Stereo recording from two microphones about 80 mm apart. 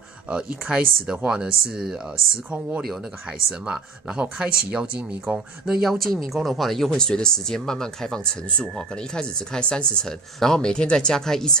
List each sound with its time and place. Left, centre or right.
0.3 s speech: centre
3.3 s speech: centre
5.7 s speech: centre